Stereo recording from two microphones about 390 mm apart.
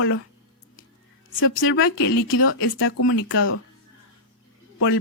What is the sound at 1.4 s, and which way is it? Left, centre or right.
Speech, left.